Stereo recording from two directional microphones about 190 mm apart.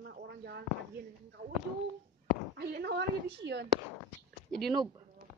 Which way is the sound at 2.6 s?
55° right (ahead or behind).